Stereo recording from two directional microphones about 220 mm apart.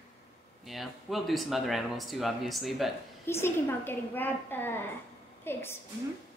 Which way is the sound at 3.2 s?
10° left (ahead or behind).